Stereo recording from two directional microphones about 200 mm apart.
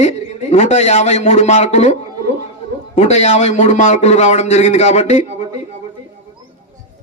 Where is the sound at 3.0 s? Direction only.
35° left (ahead or behind).